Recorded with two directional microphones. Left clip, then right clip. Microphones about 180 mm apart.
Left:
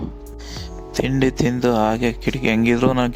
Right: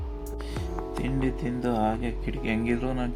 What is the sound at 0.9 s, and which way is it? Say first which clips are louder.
Speech: left 12 dB; 65° left (ahead or behind).